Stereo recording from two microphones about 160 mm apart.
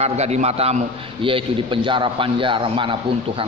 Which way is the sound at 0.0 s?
45° right (ahead or behind).